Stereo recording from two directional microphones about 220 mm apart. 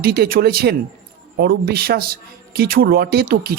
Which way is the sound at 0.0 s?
45° right (ahead or behind).